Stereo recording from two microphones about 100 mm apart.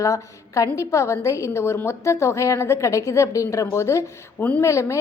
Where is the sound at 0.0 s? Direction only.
35° left (ahead or behind).